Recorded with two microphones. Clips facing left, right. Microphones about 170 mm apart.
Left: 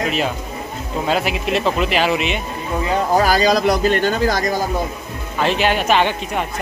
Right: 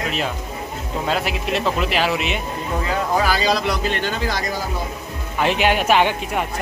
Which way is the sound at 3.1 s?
45° left (ahead or behind).